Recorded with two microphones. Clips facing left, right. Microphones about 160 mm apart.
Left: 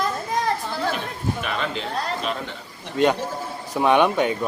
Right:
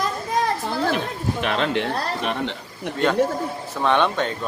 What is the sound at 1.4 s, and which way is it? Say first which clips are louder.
A man's voice: right 5 dB; 65° right (ahead or behind).